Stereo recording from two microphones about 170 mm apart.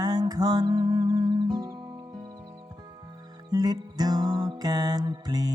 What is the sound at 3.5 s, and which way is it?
Music, 25° right (ahead or behind).